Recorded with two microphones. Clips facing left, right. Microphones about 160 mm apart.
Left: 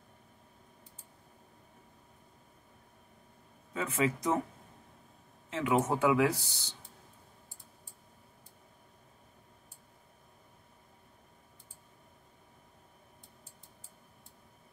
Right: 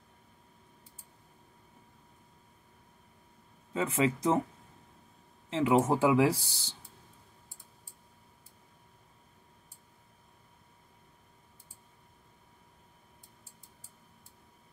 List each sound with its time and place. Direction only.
3.7 s speech: 25° right (ahead or behind)
5.5 s speech: 30° right (ahead or behind)